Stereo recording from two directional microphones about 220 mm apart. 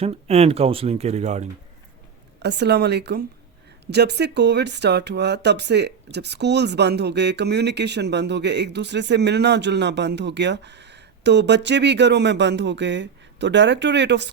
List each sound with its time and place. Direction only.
0.0 s speech: 25° right (ahead or behind)
2.4 s speech: 50° right (ahead or behind)